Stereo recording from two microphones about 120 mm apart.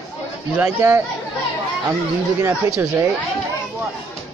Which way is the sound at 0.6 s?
20° right (ahead or behind).